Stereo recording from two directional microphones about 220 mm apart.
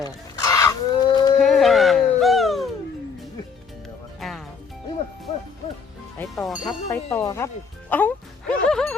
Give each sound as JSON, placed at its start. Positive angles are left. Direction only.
{"t": 0.0, "sound": "a sound", "side_deg": 15}
{"t": 1.4, "sound": "music", "side_deg": 0}
{"t": 4.2, "sound": "music", "side_deg": 0}
{"t": 6.1, "sound": "speech", "side_deg": 0}
{"t": 6.8, "sound": "music", "side_deg": 15}